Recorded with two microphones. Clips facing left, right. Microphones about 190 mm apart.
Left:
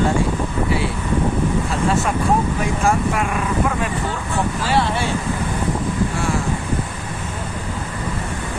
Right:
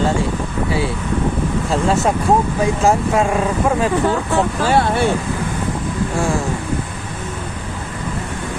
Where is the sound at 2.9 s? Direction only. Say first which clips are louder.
Right 3 dB; 25° right (ahead or behind).